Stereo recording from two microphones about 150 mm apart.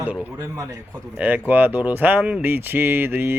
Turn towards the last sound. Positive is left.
turn(degrees=-15)  # may be behind; listen again after turning